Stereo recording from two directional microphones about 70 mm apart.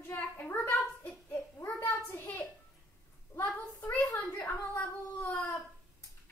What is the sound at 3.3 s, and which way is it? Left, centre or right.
Speech, left.